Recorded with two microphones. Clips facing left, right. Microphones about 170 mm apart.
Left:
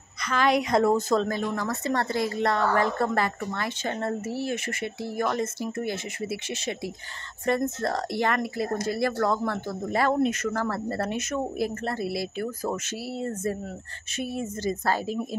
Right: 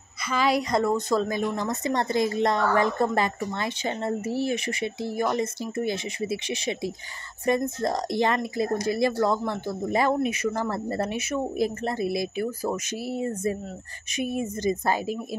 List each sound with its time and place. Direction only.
0.3 s speech: 5° right (ahead or behind)
1.2 s a woman's voice: 10° right (ahead or behind)